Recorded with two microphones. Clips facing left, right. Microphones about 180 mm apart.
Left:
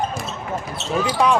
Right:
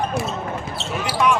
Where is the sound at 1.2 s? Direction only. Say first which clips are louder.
Even; 35° left (ahead or behind).